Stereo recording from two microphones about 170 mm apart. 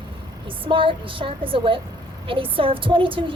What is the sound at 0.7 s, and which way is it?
Speech, 30° right (ahead or behind).